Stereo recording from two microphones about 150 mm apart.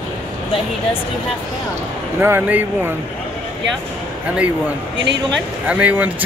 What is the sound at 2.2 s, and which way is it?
Speech, 10° right (ahead or behind).